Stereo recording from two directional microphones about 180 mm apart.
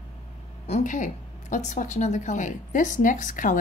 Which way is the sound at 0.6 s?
40° left (ahead or behind).